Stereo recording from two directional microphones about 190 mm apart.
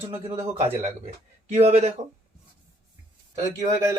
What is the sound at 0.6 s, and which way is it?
Speech, 35° right (ahead or behind).